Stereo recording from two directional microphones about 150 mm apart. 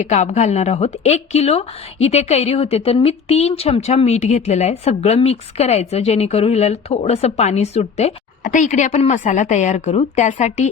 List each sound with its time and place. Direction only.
0.0 s speech: 50° left (ahead or behind)